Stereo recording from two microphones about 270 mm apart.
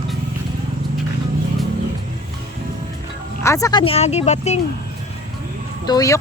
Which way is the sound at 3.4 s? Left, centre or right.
Centre.